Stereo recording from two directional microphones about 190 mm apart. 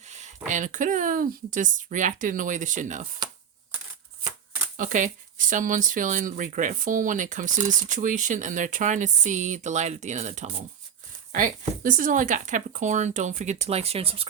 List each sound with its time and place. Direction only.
0.0 s a sound: 35° right (ahead or behind)
0.4 s speech: 40° right (ahead or behind)
4.8 s speech: 45° right (ahead or behind)